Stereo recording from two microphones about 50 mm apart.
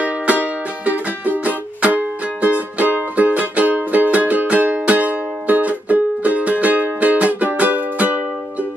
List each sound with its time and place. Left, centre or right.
0.0 s music: right